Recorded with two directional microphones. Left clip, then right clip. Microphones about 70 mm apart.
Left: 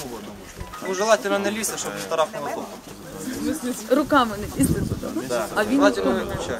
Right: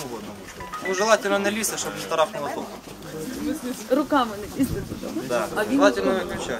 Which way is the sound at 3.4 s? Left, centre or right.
Left.